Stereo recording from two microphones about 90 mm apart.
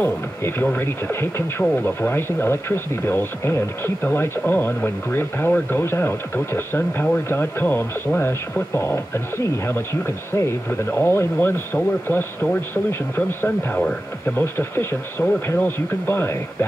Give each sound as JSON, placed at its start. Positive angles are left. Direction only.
{"t": 0.0, "sound": "speech", "side_deg": 25}